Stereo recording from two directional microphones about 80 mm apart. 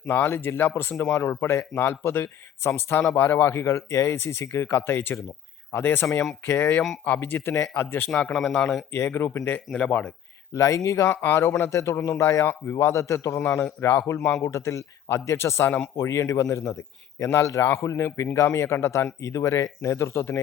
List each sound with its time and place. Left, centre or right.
0.1 s speech: left
8.2 s speech: centre
9.0 s speech: left
9.7 s speech: centre
10.5 s speech: left
13.4 s speech: left
14.1 s speech: left